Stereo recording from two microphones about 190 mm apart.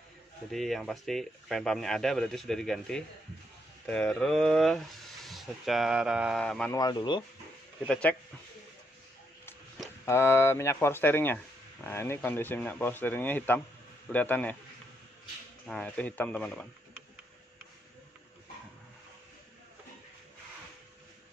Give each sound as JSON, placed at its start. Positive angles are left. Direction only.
{"t": 0.5, "sound": "speech", "side_deg": 0}
{"t": 6.7, "sound": "speech", "side_deg": 20}
{"t": 7.9, "sound": "speech", "side_deg": 5}
{"t": 10.0, "sound": "speech", "side_deg": 15}
{"t": 15.6, "sound": "speech", "side_deg": 5}